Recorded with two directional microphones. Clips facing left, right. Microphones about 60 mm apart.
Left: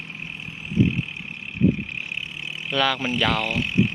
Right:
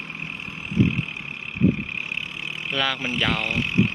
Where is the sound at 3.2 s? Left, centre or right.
Right.